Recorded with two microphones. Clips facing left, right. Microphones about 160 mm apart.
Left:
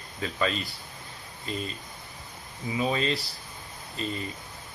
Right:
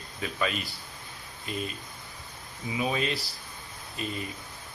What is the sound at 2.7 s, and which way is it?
Speech, 5° right (ahead or behind).